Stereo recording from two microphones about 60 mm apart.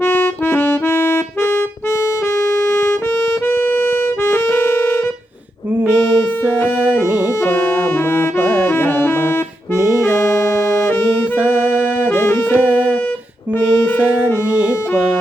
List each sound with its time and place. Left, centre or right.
0.0 s accordion: left
2.4 s music: left
8.1 s music: left
12.0 s music: left